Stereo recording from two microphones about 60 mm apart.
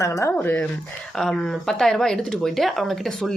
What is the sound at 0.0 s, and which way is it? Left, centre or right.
Speech, left.